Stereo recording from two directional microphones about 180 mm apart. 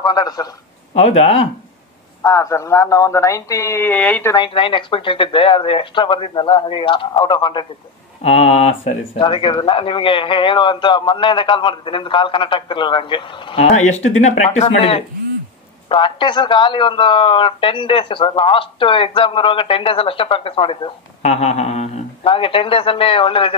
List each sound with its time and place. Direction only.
0.0 s a man's voice: 20° left (ahead or behind)
0.9 s speech: 35° left (ahead or behind)
2.2 s speech: 15° left (ahead or behind)
4.4 s a man's voice: 30° left (ahead or behind)